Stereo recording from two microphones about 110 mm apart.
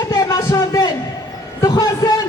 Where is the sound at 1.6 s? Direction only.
30° left (ahead or behind).